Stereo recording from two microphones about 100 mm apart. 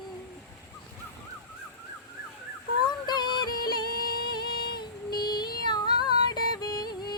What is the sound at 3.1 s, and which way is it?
Music, 45° left (ahead or behind).